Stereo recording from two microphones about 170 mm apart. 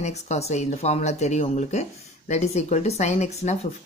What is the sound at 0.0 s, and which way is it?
Speech, 40° left (ahead or behind).